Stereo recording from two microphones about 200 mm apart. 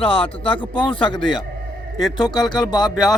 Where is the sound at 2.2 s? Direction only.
20° left (ahead or behind).